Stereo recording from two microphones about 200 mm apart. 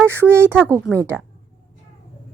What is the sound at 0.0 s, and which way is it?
Speech, 10° right (ahead or behind).